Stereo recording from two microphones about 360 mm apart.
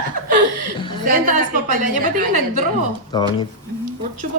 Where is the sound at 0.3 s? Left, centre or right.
Right.